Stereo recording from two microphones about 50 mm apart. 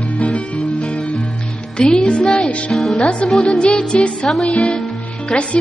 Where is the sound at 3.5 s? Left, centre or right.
Centre.